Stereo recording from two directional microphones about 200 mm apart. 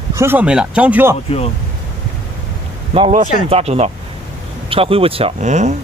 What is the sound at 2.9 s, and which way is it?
Speech, 30° right (ahead or behind).